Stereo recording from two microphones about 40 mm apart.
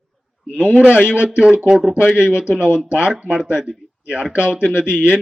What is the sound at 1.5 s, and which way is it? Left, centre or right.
Speech, right.